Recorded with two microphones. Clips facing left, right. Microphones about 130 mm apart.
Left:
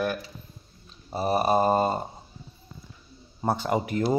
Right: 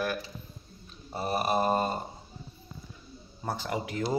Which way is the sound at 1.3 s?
35° left (ahead or behind).